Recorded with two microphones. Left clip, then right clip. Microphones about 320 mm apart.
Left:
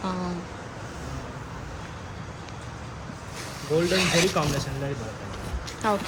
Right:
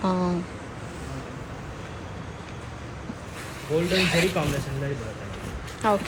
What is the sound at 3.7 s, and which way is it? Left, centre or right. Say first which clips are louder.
Speech: left 1 dB; left.